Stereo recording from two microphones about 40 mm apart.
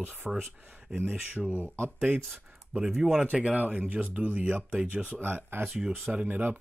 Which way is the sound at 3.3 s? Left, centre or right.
Right.